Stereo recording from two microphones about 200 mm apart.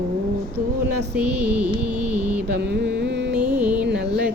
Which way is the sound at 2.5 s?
55° right (ahead or behind).